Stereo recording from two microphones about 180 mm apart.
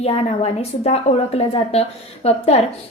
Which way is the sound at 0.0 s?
35° left (ahead or behind).